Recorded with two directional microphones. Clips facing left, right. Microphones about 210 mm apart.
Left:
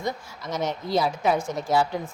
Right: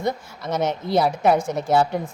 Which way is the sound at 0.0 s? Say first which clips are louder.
Right 5 dB; 60° right (ahead or behind).